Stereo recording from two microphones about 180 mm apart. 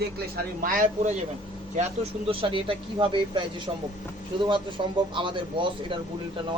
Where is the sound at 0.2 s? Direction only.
50° right (ahead or behind).